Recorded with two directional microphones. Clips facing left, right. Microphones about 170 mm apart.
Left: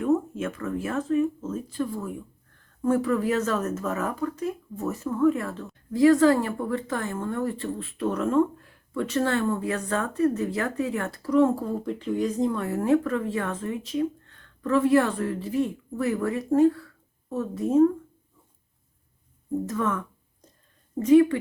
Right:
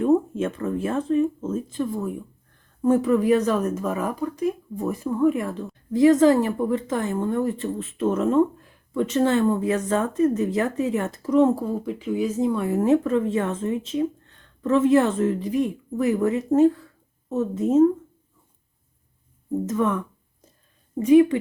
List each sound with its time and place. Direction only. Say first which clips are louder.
0.0 s a woman's voice: right 4 dB; 30° right (ahead or behind)
11.6 s a woman's voice: right 2 dB; 5° right (ahead or behind); by 17.8 s 20° right (ahead or behind)
19.6 s a woman's voice: right 6 dB; 20° right (ahead or behind)